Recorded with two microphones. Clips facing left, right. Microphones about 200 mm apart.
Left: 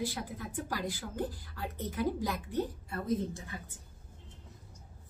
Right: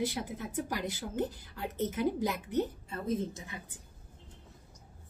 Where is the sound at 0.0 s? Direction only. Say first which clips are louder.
Right 3 dB; 20° right (ahead or behind).